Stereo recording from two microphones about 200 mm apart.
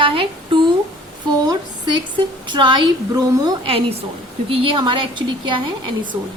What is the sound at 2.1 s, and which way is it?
A woman's voice, 25° right (ahead or behind).